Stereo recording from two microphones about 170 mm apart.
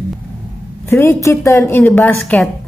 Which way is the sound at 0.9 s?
15° left (ahead or behind).